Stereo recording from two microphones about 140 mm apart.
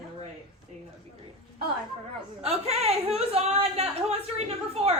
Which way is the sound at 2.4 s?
45° right (ahead or behind).